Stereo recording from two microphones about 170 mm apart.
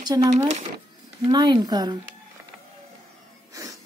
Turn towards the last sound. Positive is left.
turn(degrees=-20)  # may be behind; listen again after turning